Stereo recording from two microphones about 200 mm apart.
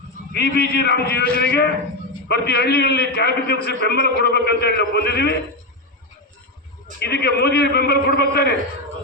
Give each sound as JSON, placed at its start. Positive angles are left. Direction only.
{"t": 0.3, "sound": "a man's voice", "side_deg": 55}
{"t": 7.0, "sound": "a man's voice", "side_deg": 55}